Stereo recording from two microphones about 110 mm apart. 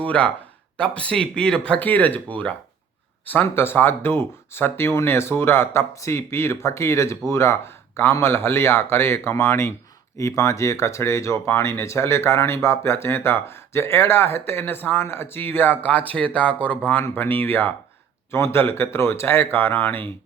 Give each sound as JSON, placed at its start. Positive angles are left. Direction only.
{"t": 0.0, "sound": "speech", "side_deg": 10}